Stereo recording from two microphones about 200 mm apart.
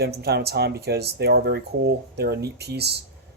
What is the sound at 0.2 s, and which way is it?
Speech, 55° right (ahead or behind).